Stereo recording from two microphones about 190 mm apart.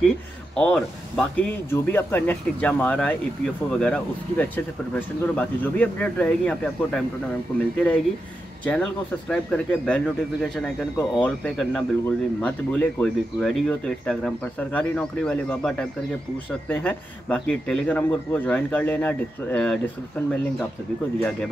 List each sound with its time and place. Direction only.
0.6 s a man's voice: 5° left (ahead or behind)
9.3 s a man's voice: 5° left (ahead or behind)
21.2 s speech: 5° left (ahead or behind)